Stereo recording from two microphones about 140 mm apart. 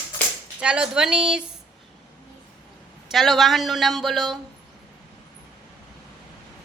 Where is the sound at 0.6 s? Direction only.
5° right (ahead or behind).